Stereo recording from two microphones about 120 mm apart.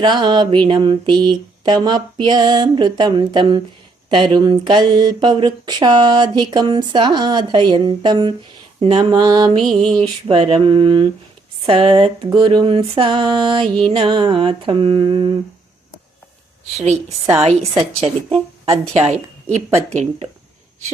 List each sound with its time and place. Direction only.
0.0 s speech: 40° right (ahead or behind)
8.8 s speech: 55° right (ahead or behind)
9.0 s speech: 35° right (ahead or behind)
9.7 s a sound: 45° right (ahead or behind)
16.7 s speech: 70° right (ahead or behind)
17.4 s speech: 55° right (ahead or behind)
18.9 s a woman's voice: 70° right (ahead or behind)